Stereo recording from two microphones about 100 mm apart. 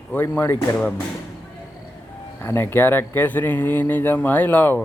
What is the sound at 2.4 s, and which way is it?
Speech, 25° left (ahead or behind).